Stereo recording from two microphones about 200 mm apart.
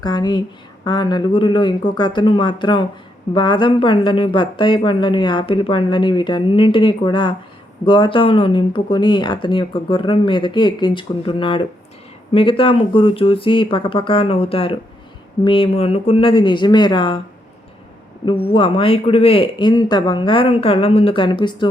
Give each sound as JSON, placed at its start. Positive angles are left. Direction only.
{"t": 0.0, "sound": "speech", "side_deg": 20}
{"t": 18.5, "sound": "speech", "side_deg": 25}